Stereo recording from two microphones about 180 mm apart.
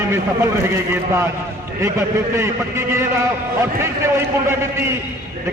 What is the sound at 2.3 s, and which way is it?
Speech, 15° right (ahead or behind).